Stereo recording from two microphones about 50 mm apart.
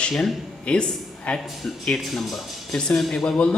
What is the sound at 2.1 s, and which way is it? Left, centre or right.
Speech, centre.